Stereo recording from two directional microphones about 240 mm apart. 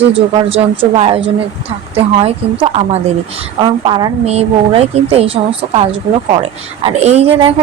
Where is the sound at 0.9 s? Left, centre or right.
Right.